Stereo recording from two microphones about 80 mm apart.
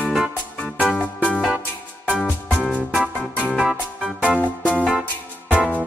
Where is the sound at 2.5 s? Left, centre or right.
Centre.